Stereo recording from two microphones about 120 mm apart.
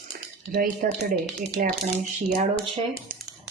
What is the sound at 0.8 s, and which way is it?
Speech, 90° right.